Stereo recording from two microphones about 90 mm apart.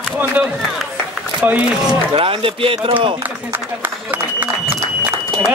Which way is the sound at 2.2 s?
90° right.